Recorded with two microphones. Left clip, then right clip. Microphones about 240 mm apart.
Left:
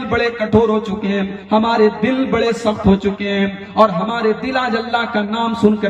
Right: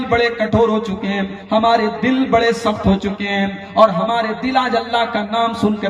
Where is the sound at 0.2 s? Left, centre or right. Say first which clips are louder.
Left 3 dB; right.